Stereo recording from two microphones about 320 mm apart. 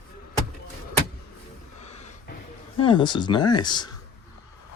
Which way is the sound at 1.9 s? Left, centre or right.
Centre.